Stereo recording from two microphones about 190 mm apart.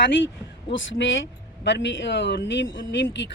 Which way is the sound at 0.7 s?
85° left.